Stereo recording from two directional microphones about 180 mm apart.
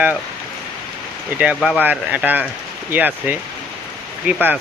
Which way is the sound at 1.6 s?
5° right (ahead or behind).